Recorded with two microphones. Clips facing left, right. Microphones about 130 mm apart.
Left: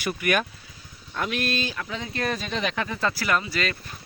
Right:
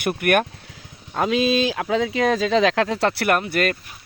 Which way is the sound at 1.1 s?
90° right.